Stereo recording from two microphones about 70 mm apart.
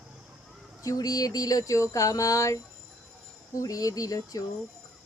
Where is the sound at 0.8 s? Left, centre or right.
Left.